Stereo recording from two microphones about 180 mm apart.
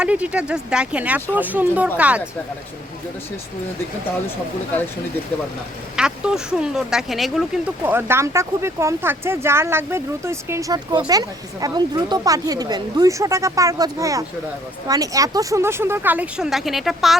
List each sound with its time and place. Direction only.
0.0 s speech: 5° right (ahead or behind)
6.0 s speech: 5° right (ahead or behind)
7.9 s speech: 15° right (ahead or behind)